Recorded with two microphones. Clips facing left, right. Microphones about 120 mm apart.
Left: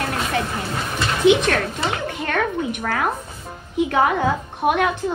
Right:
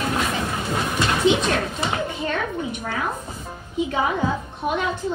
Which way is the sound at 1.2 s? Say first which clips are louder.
Left 6 dB; 60° left (ahead or behind).